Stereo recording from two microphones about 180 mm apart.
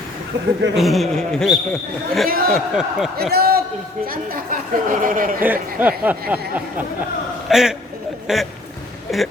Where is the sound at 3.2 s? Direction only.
60° right (ahead or behind).